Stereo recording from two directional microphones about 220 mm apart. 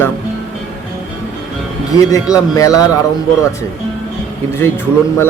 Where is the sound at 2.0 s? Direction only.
15° left (ahead or behind).